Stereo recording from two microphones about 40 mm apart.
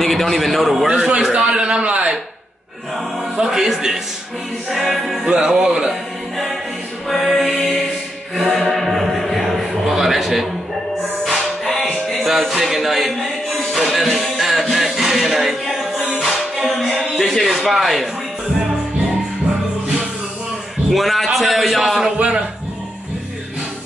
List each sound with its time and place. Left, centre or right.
0.0 s a man's voice: centre
0.8 s a man's voice: right
3.4 s a man's voice: centre
5.2 s speech: centre
5.9 s choir: centre
7.1 s music: centre
9.9 s a sound: centre
11.2 s music: centre
20.9 s a man's voice: centre